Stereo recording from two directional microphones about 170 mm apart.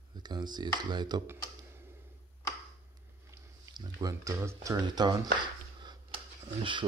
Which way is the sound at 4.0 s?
20° right (ahead or behind).